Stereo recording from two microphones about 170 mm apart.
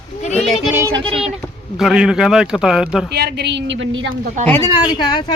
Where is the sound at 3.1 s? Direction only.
75° right (ahead or behind); by 4.0 s 90° right.